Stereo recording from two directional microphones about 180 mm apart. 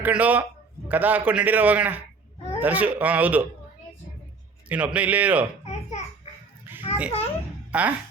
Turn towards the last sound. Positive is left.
turn(degrees=-5)  # may be behind; listen again after turning